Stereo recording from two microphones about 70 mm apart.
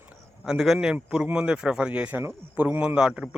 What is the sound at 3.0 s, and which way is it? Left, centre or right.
Speech, centre.